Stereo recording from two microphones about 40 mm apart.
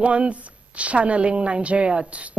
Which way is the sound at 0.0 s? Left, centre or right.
Right.